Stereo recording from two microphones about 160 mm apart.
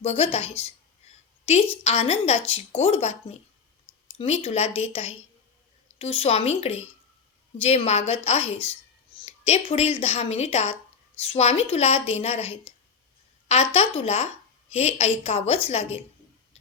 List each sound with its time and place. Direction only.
0.0 s a woman's voice: 40° left (ahead or behind)
1.8 s a woman's voice: 40° left (ahead or behind)
4.2 s a woman's voice: 40° left (ahead or behind)